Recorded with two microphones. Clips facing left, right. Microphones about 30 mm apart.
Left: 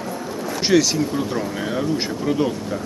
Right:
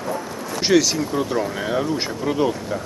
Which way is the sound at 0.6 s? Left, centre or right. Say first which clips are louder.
Even; centre.